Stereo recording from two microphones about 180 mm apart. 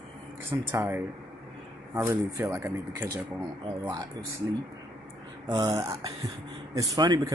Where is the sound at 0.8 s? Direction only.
10° right (ahead or behind).